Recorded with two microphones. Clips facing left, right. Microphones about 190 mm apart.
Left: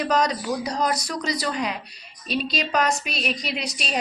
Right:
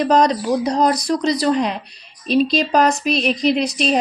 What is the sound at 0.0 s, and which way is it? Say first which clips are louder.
A woman's voice: right 7 dB; 30° right (ahead or behind).